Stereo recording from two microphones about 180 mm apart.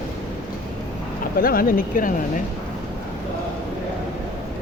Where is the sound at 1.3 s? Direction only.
55° left (ahead or behind).